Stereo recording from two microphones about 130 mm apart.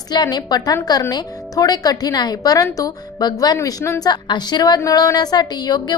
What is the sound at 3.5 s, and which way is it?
A woman's voice, 20° left (ahead or behind).